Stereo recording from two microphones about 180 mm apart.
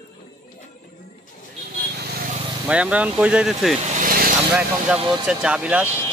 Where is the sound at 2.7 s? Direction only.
5° right (ahead or behind).